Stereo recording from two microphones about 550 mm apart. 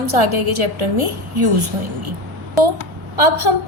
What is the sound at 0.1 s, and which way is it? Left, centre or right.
A woman's voice, right.